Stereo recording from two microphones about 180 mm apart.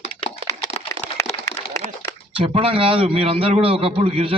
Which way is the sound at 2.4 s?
30° right (ahead or behind).